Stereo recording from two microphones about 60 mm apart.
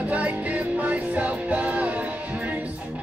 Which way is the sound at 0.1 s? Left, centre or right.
Right.